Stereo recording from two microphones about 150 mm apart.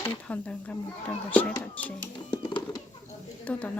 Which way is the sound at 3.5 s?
10° left (ahead or behind).